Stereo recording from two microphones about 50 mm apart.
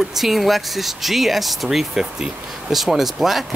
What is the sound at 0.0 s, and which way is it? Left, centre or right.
Speech, centre.